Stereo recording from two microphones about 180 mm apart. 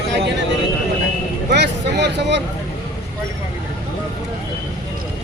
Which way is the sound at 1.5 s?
70° right (ahead or behind).